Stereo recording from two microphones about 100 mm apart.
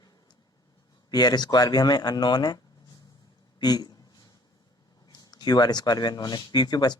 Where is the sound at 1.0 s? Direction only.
45° left (ahead or behind).